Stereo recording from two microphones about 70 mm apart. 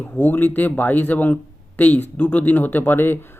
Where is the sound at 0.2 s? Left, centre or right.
Left.